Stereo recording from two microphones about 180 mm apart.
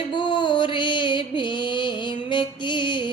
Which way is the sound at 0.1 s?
25° left (ahead or behind).